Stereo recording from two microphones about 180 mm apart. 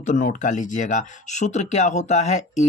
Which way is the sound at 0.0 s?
45° left (ahead or behind).